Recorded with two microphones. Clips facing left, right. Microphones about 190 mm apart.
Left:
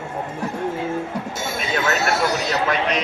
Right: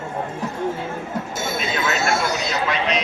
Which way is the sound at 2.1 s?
35° left (ahead or behind).